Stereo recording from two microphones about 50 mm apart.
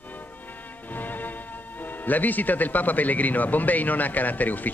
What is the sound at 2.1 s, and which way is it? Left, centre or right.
A man's voice, left.